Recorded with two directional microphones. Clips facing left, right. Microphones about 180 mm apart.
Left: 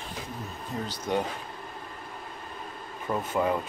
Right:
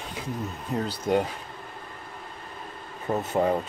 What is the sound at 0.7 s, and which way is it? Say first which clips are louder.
Speech: right 5 dB; 55° right (ahead or behind).